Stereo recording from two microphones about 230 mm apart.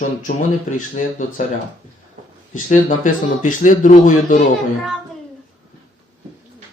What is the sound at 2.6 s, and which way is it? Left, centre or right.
A man's voice, left.